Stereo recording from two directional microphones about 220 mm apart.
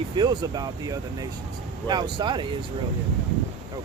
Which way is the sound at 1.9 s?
20° right (ahead or behind).